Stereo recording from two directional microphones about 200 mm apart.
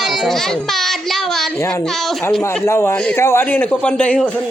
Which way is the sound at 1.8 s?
Centre (ahead or behind).